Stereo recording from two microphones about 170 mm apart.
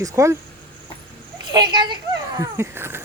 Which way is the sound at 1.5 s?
25° right (ahead or behind).